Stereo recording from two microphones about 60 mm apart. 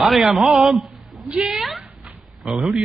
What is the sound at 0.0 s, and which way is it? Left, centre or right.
A man's voice, centre.